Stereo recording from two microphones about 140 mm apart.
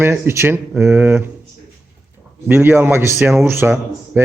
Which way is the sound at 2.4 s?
15° right (ahead or behind).